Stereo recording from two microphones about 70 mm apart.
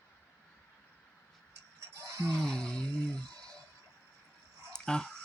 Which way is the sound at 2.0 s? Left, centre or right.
Right.